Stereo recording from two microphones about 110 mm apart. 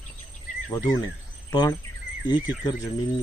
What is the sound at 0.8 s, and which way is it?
Speech, 35° left (ahead or behind).